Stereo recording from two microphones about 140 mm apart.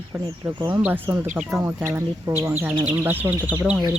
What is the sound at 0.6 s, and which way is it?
Speech, 10° right (ahead or behind).